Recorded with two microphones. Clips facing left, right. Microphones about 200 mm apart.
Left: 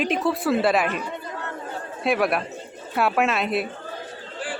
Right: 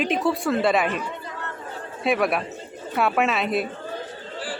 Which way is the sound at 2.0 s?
Centre (ahead or behind).